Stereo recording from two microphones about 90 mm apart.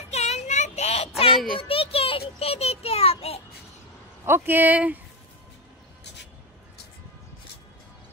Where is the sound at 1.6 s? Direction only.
90° left.